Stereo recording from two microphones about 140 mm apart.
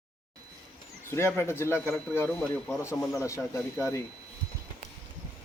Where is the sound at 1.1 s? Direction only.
20° left (ahead or behind).